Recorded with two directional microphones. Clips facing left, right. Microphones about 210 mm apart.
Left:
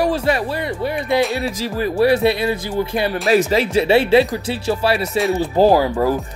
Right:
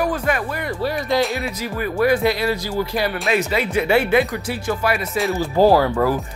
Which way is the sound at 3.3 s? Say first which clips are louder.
Left 7 dB; 35° left (ahead or behind).